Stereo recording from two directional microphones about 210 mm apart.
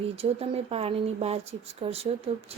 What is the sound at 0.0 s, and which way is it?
Speech, 30° right (ahead or behind).